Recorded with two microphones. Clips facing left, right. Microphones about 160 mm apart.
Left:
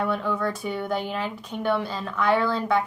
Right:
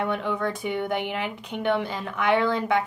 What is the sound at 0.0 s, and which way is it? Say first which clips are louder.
A woman's voice: left 1 dB; 20° right (ahead or behind).